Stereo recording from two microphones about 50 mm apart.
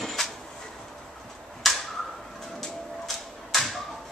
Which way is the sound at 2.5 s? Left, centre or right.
Centre.